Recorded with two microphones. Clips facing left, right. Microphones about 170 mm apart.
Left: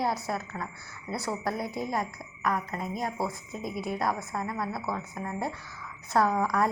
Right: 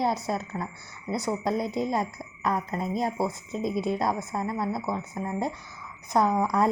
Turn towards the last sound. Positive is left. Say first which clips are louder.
# right 2 dB
turn(degrees=-20)  # may be behind; listen again after turning